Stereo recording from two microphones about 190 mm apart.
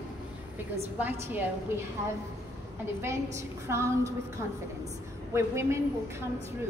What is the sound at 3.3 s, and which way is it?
Speech, 15° right (ahead or behind).